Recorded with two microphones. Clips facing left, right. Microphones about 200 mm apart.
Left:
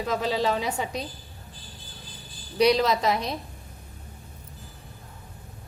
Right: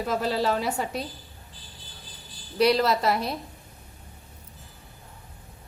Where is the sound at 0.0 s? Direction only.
5° right (ahead or behind).